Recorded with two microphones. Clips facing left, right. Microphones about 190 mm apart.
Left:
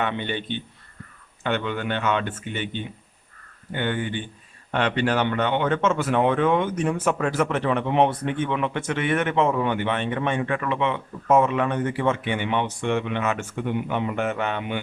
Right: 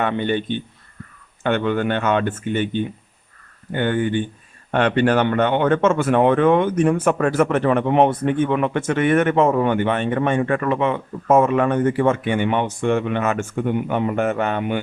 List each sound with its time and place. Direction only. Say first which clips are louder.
0.0 s speech: right 6 dB; 45° right (ahead or behind)